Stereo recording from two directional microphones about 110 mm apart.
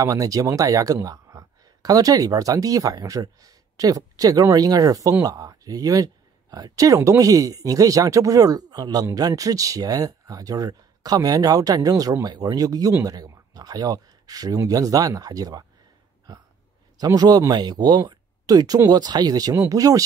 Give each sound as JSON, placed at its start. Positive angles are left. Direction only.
{"t": 0.0, "sound": "speech", "side_deg": -30}
{"t": 17.0, "sound": "speech", "side_deg": -35}